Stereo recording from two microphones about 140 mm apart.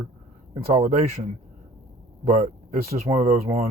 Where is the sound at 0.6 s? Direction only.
65° right (ahead or behind).